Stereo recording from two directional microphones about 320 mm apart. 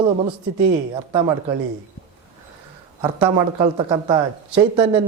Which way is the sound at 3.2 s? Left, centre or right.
Centre.